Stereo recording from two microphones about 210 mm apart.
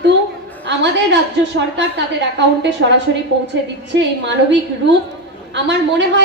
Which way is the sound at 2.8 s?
60° right (ahead or behind).